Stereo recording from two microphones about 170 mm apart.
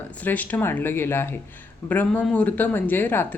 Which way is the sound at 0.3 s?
10° left (ahead or behind).